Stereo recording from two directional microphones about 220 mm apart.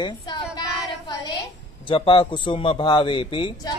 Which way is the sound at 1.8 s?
25° left (ahead or behind).